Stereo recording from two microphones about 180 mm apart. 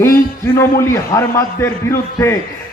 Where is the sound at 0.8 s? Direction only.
15° left (ahead or behind).